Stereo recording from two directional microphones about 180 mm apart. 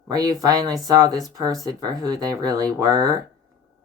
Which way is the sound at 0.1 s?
20° right (ahead or behind).